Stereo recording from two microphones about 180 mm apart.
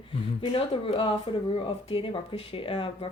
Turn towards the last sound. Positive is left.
turn(degrees=30)  # may be behind; listen again after turning